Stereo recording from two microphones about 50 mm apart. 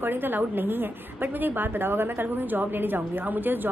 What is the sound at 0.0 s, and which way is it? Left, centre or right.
A woman's voice, right.